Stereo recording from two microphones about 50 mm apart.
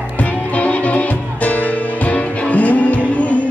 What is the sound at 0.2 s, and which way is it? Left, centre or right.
Music, left.